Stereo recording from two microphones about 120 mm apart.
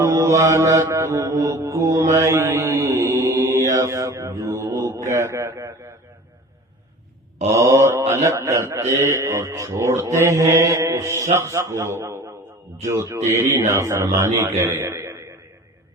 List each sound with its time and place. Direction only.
0.0 s mantra: 25° right (ahead or behind)
5.0 s a man's voice: 25° right (ahead or behind)
7.5 s mantra: 25° right (ahead or behind)
14.3 s a man's voice: 25° right (ahead or behind)